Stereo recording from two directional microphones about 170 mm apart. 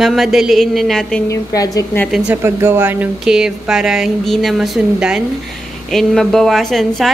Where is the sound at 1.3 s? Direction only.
20° left (ahead or behind).